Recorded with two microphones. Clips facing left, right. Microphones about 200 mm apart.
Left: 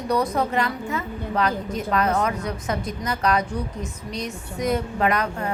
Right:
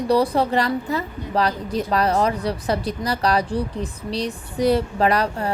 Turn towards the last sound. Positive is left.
turn(degrees=-35)  # may be behind; listen again after turning